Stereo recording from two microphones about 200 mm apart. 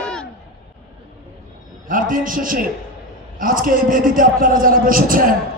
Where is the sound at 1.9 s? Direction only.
40° right (ahead or behind).